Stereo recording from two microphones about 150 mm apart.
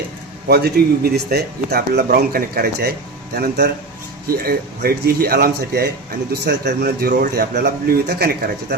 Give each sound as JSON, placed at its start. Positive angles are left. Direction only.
{"t": 0.4, "sound": "speech", "side_deg": -90}